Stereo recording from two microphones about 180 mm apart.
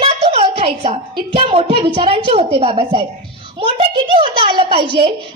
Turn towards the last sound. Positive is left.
turn(degrees=-30)  # may be behind; listen again after turning